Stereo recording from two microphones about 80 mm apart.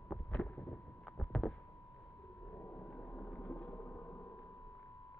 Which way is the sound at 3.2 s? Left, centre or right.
Centre.